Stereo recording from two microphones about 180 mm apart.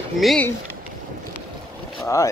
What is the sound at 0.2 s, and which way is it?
Speech, centre (ahead or behind).